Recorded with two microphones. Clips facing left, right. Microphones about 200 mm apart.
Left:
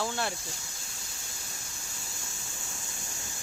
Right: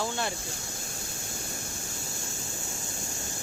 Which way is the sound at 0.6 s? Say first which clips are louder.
Right 8 dB; 55° right (ahead or behind).